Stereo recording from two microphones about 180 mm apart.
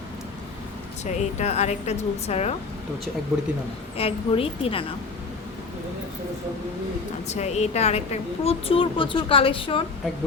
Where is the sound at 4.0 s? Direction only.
30° left (ahead or behind).